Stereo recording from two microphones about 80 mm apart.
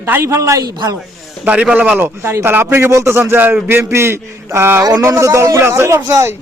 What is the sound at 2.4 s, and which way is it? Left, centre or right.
A man's voice, right.